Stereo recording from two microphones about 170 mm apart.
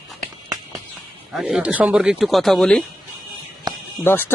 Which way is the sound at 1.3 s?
5° right (ahead or behind).